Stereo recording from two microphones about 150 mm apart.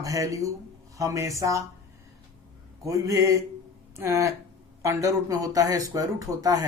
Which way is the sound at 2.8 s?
20° right (ahead or behind).